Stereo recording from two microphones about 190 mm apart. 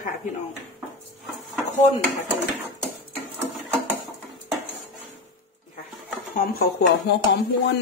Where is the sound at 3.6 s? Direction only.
5° right (ahead or behind).